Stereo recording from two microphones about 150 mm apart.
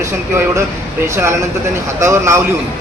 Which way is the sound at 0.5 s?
15° right (ahead or behind).